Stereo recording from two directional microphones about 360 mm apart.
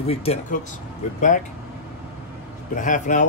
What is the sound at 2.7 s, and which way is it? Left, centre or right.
Speech, left.